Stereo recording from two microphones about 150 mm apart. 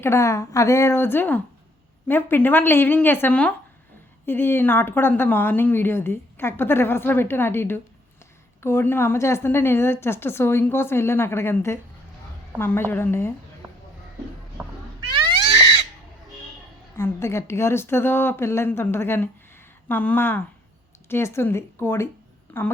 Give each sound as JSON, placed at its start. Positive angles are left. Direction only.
{"t": 0.0, "sound": "speech", "side_deg": 20}
{"t": 15.1, "sound": "cat", "side_deg": -25}
{"t": 17.0, "sound": "speech", "side_deg": 15}